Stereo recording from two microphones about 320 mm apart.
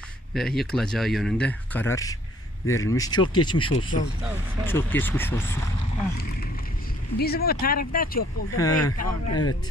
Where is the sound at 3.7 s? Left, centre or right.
Left.